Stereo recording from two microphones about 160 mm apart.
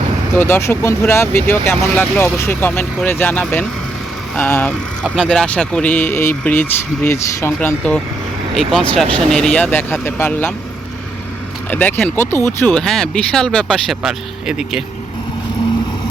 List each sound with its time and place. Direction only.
0.3 s speech: 15° left (ahead or behind)
5.0 s speech: 5° right (ahead or behind)
5.3 s speech: 5° left (ahead or behind)
11.7 s speech: 10° left (ahead or behind)